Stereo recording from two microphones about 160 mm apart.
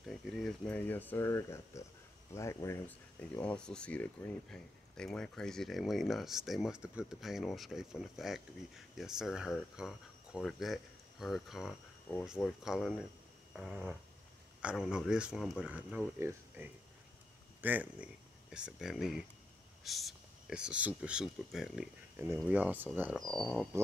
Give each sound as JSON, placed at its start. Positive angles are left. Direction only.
{"t": 0.0, "sound": "speech", "side_deg": 5}
{"t": 23.1, "sound": "speech", "side_deg": 5}